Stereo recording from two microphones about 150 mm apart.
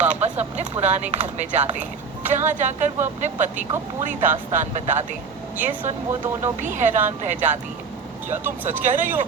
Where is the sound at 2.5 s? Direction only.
55° right (ahead or behind).